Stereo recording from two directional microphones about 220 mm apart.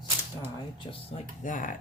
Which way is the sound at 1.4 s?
35° left (ahead or behind).